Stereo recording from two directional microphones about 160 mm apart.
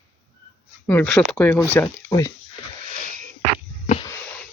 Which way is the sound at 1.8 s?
20° left (ahead or behind).